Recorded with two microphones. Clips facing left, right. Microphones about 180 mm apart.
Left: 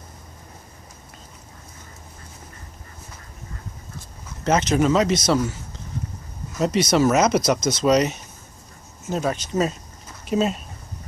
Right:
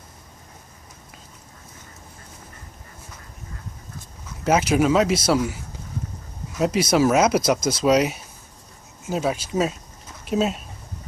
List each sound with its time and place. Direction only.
4.5 s speech: 10° right (ahead or behind)
6.6 s speech: 5° right (ahead or behind)